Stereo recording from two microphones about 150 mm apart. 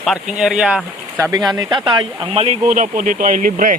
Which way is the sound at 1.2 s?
25° right (ahead or behind).